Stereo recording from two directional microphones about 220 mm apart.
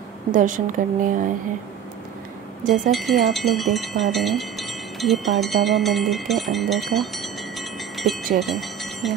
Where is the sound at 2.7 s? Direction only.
Centre (ahead or behind).